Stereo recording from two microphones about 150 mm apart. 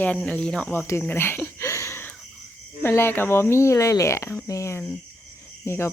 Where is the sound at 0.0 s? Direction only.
10° left (ahead or behind).